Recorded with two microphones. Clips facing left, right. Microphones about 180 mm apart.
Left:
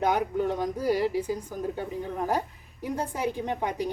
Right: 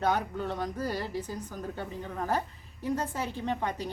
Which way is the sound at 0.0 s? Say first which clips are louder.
Left 4 dB; 15° left (ahead or behind).